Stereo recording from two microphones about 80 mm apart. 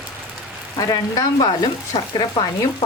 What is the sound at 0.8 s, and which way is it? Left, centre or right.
Speech, left.